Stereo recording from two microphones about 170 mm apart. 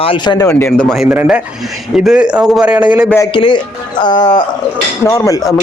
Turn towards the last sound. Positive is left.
turn(degrees=20)  # may be behind; listen again after turning